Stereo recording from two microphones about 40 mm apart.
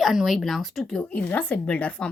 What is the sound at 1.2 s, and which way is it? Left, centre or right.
Speech, left.